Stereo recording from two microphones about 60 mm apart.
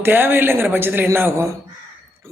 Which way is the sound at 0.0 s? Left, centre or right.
Right.